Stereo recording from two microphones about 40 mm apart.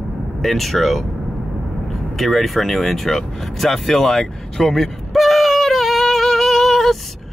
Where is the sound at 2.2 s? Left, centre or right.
Centre.